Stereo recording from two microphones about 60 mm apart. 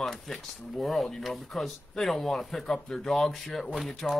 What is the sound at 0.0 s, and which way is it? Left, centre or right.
Speech, centre.